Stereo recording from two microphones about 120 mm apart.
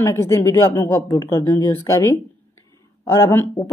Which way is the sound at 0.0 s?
25° left (ahead or behind).